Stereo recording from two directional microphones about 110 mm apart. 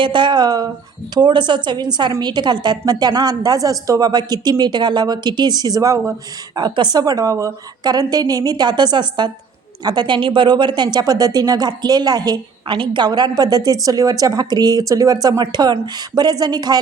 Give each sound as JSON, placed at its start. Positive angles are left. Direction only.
{"t": 0.0, "sound": "a woman's voice", "side_deg": -45}